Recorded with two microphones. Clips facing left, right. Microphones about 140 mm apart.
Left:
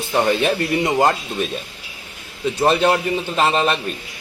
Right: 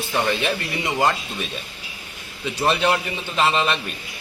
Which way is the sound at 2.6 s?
40° left (ahead or behind).